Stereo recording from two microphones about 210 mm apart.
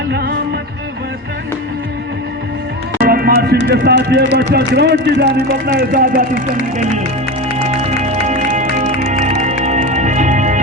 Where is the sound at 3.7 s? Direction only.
50° right (ahead or behind).